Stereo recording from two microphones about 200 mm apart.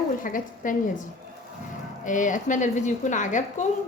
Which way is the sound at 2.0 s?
40° left (ahead or behind).